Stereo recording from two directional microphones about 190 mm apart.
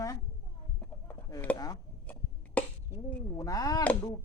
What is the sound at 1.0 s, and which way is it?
Chicken, 10° left (ahead or behind).